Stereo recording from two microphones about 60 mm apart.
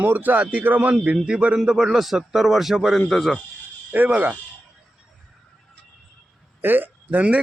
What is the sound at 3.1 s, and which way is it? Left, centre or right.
Speech, centre.